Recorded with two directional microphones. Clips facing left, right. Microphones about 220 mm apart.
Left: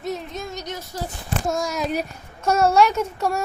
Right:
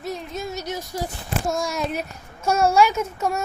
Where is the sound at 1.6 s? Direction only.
Centre (ahead or behind).